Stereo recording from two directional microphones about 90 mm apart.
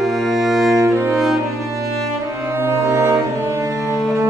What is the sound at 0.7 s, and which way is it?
Music, 30° right (ahead or behind).